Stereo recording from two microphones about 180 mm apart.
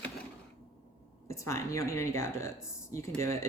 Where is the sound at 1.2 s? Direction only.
15° left (ahead or behind).